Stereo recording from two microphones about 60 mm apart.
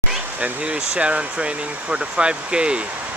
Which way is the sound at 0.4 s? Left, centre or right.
Right.